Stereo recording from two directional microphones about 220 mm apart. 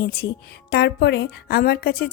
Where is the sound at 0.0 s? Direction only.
45° left (ahead or behind).